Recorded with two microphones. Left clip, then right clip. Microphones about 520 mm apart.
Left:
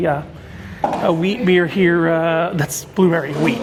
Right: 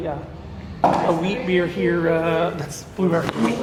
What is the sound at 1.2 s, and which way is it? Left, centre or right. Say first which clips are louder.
Speech: left 5 dB; left.